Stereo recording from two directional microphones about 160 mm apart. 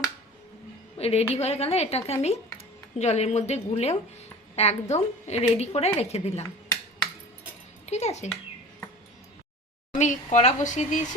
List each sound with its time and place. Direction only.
0.9 s a woman's voice: 40° left (ahead or behind)
7.9 s music: 45° left (ahead or behind)
10.0 s speech: 50° left (ahead or behind)